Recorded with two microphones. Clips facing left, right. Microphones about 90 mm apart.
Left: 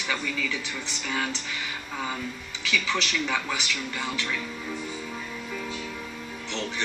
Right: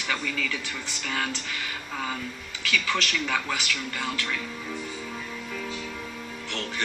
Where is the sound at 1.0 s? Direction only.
10° left (ahead or behind).